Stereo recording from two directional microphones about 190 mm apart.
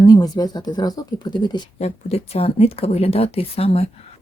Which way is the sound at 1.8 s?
35° left (ahead or behind).